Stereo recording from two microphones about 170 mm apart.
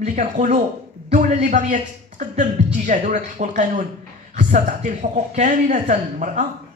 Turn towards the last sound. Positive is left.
turn(degrees=-50)  # may be behind; listen again after turning